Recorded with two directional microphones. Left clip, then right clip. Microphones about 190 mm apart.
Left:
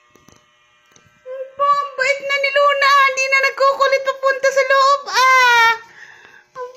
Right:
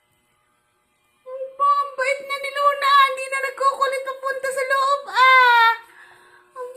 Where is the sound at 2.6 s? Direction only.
30° left (ahead or behind).